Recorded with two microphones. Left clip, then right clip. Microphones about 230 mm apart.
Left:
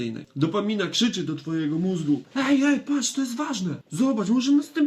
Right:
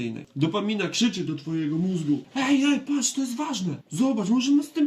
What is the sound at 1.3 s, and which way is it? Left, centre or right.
Speech, centre.